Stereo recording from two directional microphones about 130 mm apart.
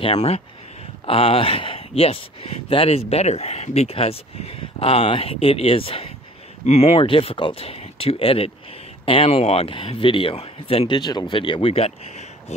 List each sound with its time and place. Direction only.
0.0 s speech: 50° left (ahead or behind)
11.0 s speech: 35° left (ahead or behind); by 12.5 s 55° left (ahead or behind)